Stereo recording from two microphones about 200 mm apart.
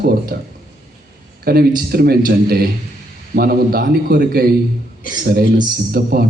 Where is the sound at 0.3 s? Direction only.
50° right (ahead or behind).